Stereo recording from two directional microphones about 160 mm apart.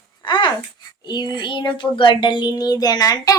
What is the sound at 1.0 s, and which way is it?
A woman's voice, 25° left (ahead or behind).